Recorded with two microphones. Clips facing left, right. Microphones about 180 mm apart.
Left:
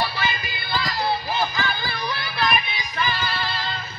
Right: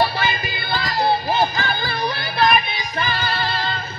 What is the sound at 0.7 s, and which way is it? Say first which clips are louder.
Music: right 4 dB; 60° right (ahead or behind).